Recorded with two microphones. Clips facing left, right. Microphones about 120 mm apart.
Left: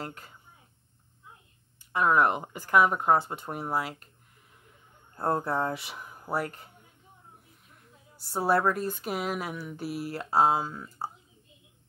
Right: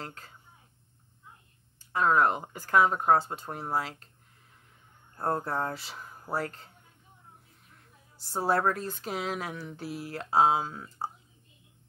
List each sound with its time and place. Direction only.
0.0 s speech: 10° left (ahead or behind)
1.9 s speech: 10° left (ahead or behind)
5.1 s speech: 10° left (ahead or behind)
8.3 s speech: 10° left (ahead or behind)